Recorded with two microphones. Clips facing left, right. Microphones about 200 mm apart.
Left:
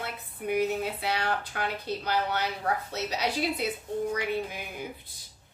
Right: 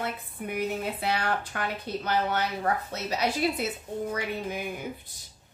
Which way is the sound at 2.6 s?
50° right (ahead or behind).